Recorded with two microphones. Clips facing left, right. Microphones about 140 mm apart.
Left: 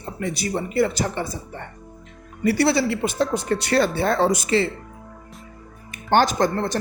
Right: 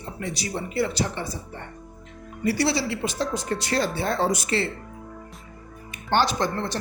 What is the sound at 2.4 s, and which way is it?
Speech, 60° left (ahead or behind).